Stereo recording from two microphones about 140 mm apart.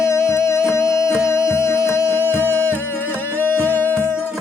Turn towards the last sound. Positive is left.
turn(degrees=15)  # may be behind; listen again after turning